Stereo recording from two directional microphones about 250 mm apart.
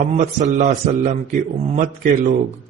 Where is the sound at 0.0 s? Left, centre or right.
Right.